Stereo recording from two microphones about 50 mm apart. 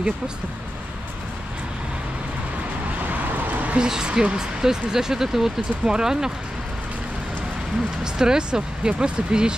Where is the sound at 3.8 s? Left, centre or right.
Centre.